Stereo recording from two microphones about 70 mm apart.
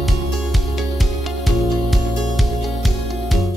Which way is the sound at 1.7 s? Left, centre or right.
Centre.